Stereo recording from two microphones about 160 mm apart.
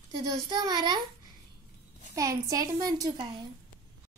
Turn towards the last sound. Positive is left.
turn(degrees=-25)  # may be behind; listen again after turning